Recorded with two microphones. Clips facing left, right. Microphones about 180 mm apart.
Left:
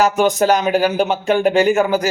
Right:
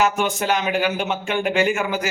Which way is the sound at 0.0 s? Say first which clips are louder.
Left 6 dB; 40° left (ahead or behind).